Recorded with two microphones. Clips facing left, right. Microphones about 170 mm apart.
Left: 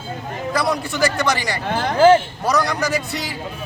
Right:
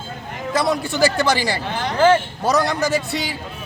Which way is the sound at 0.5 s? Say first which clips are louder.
Right 2 dB; 25° right (ahead or behind).